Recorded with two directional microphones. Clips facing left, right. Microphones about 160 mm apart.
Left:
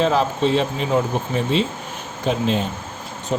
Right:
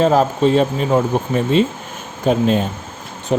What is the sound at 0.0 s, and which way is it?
Speech, 45° right (ahead or behind).